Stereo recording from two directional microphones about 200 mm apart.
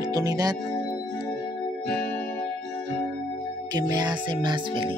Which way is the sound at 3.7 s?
20° right (ahead or behind).